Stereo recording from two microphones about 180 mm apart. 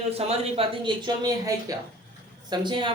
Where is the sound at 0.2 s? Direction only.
35° right (ahead or behind).